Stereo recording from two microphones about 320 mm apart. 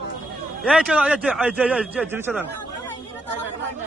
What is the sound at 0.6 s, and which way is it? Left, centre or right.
A man's voice, centre.